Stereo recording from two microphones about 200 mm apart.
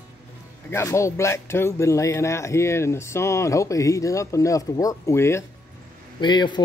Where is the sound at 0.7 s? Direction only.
15° left (ahead or behind).